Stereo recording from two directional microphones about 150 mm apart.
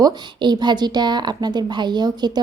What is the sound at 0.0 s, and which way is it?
A woman's voice, 30° right (ahead or behind).